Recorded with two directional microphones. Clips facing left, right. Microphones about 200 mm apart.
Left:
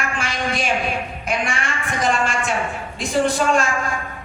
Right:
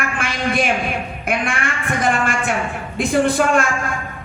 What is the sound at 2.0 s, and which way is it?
A woman's voice, 55° right (ahead or behind).